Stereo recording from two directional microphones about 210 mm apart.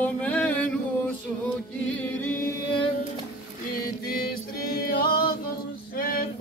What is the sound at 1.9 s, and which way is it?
Music, 10° left (ahead or behind).